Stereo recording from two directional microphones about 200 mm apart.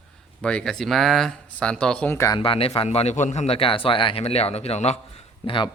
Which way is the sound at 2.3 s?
25° left (ahead or behind).